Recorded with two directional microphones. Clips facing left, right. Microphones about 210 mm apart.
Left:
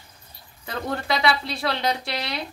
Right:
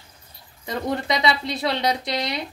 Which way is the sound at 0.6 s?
20° right (ahead or behind).